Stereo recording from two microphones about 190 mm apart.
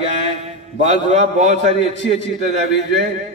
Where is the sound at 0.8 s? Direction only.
35° right (ahead or behind).